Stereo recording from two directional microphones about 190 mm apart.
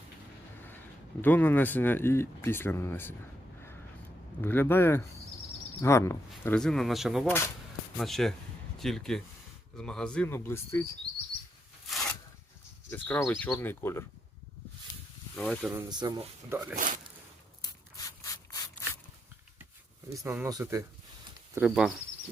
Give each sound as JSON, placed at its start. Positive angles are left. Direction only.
{"t": 1.2, "sound": "speech", "side_deg": 10}
{"t": 4.4, "sound": "speech", "side_deg": 10}
{"t": 7.3, "sound": "speech", "side_deg": 15}
{"t": 7.9, "sound": "speech", "side_deg": 0}
{"t": 12.9, "sound": "speech", "side_deg": 10}
{"t": 15.4, "sound": "speech", "side_deg": 0}
{"t": 15.8, "sound": "speech", "side_deg": -20}
{"t": 16.7, "sound": "speech", "side_deg": -45}
{"t": 17.6, "sound": "rub", "side_deg": 20}
{"t": 20.2, "sound": "speech", "side_deg": -10}
{"t": 21.5, "sound": "speech", "side_deg": -5}